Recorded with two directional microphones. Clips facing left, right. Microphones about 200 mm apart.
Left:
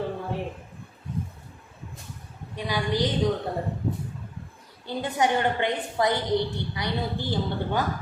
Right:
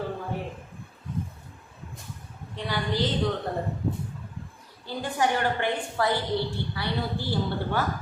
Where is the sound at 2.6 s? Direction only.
10° left (ahead or behind).